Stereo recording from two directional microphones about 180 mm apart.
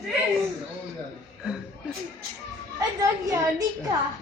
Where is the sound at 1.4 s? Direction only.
5° right (ahead or behind).